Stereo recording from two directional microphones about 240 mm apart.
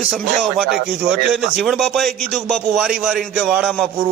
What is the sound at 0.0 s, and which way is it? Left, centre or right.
A man's voice, centre.